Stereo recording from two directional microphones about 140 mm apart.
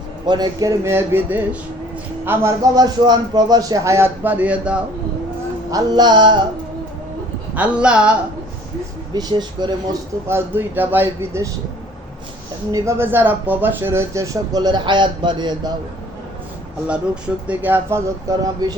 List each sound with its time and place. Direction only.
0.3 s speech: 30° right (ahead or behind)
2.7 s speech: 30° right (ahead or behind); by 4.8 s 10° right (ahead or behind)
5.7 s a sound: 30° right (ahead or behind)
7.5 s speech: 10° right (ahead or behind)
9.1 s a sound: 30° right (ahead or behind)
10.2 s speech: 15° right (ahead or behind)
12.7 s speech: 20° right (ahead or behind)
16.8 s speech: 10° right (ahead or behind); by 18.8 s 25° right (ahead or behind)